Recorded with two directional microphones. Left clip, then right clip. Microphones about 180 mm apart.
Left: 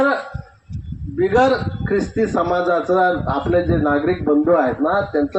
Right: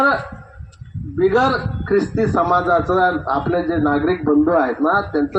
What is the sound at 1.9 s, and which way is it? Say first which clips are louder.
A man's voice: right 2 dB; 25° left (ahead or behind).